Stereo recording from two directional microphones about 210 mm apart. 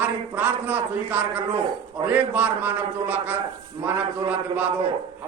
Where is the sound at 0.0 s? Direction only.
10° right (ahead or behind).